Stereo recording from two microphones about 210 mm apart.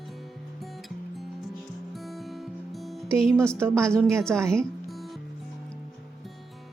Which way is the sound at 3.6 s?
5° left (ahead or behind).